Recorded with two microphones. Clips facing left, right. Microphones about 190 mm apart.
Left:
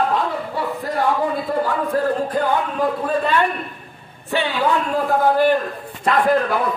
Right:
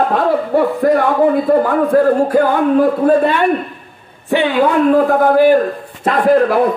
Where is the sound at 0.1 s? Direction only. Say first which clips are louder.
Right 9 dB; 60° right (ahead or behind).